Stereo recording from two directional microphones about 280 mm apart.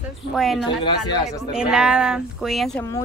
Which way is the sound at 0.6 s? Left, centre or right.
Centre.